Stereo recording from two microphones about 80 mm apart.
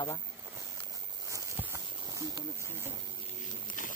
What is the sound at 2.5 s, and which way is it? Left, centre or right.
Speech, right.